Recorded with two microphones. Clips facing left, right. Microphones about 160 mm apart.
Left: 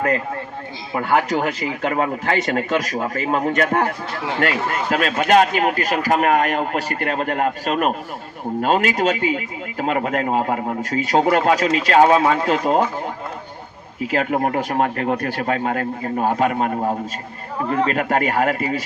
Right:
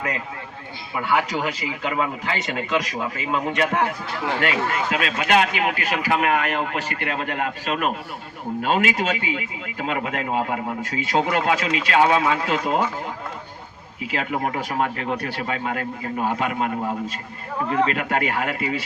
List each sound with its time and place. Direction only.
0.9 s speech: 45° left (ahead or behind)
14.0 s speech: 45° left (ahead or behind)